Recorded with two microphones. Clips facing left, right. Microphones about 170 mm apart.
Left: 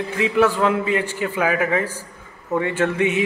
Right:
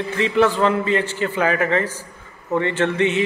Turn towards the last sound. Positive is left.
turn(degrees=10)  # may be behind; listen again after turning